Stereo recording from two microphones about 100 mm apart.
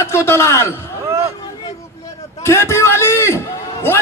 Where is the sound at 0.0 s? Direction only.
25° left (ahead or behind).